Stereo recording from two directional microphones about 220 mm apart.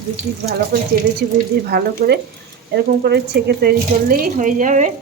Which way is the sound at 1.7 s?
45° right (ahead or behind).